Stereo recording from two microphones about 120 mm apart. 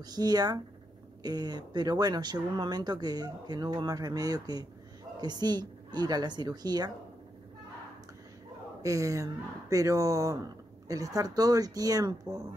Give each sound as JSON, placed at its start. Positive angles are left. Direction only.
{"t": 0.0, "sound": "speech", "side_deg": -35}
{"t": 8.8, "sound": "speech", "side_deg": -25}